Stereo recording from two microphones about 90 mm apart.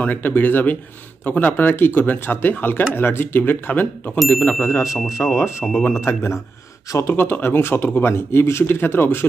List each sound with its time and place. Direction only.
0.0 s speech: 20° left (ahead or behind)
4.8 s speech: centre (ahead or behind)
5.2 s speech: 35° left (ahead or behind)
5.7 s speech: 20° left (ahead or behind)